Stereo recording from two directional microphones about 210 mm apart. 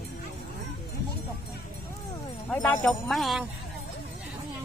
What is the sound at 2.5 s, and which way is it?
Speech, 5° left (ahead or behind).